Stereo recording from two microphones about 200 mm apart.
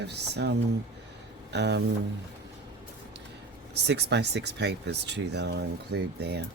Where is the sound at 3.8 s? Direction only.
60° right (ahead or behind).